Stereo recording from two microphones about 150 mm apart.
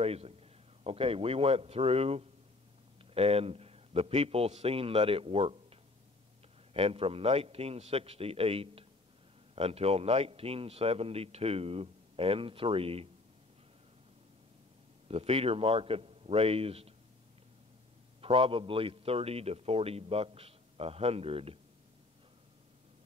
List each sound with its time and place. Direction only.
0.0 s a man's voice: 40° right (ahead or behind)
15.0 s a man's voice: 40° right (ahead or behind)
18.2 s a man's voice: 40° right (ahead or behind)